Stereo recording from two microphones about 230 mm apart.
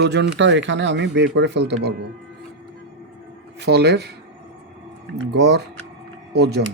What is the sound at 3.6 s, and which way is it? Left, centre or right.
Speech, right.